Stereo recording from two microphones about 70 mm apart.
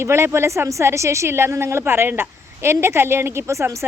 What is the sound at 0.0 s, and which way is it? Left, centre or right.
A woman's voice, right.